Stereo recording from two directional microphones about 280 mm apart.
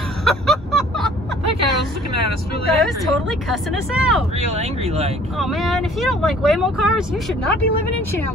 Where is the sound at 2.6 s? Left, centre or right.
Centre.